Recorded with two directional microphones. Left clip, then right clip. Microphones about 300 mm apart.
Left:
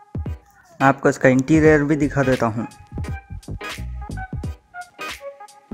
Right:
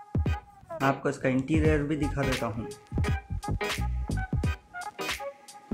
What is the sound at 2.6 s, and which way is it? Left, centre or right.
Music, centre.